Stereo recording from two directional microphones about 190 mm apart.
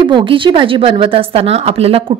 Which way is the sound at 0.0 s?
25° right (ahead or behind).